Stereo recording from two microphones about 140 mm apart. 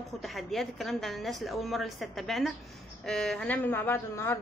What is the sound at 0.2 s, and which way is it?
A woman's voice, centre (ahead or behind).